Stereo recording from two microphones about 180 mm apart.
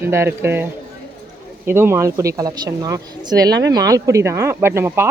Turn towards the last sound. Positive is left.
turn(degrees=-15)  # may be behind; listen again after turning